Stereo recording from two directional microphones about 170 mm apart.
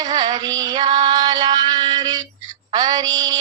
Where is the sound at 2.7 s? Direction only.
25° right (ahead or behind).